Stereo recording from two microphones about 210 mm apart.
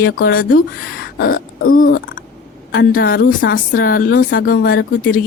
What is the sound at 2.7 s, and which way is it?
Speech, 45° left (ahead or behind).